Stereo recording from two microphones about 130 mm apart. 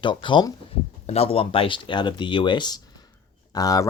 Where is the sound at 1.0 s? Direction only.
50° left (ahead or behind).